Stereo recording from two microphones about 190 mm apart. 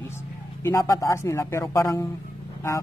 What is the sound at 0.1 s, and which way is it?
Speech, 15° left (ahead or behind).